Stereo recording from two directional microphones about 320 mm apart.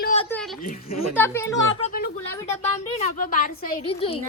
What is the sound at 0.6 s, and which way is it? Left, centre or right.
Speech, left.